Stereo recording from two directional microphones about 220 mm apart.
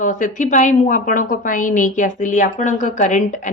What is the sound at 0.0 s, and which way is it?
A woman's voice, 35° left (ahead or behind).